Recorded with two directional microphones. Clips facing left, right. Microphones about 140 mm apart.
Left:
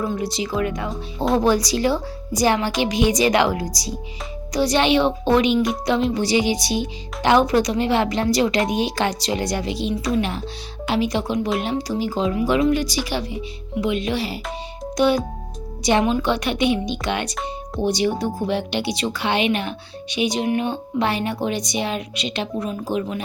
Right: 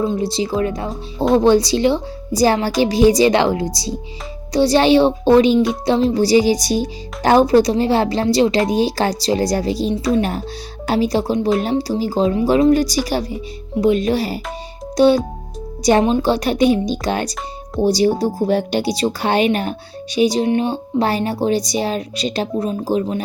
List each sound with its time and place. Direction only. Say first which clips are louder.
0.0 s a woman's voice: right 5 dB; 25° right (ahead or behind); by 14.3 s 40° right (ahead or behind)
14.9 s music: right 6 dB; 30° right (ahead or behind)
15.8 s speech: right 4 dB; 40° right (ahead or behind)